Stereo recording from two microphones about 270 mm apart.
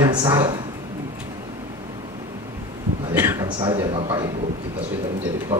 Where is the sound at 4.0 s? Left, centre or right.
Centre.